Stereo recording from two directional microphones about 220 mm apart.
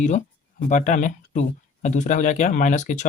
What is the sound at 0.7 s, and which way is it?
Speech, 35° left (ahead or behind).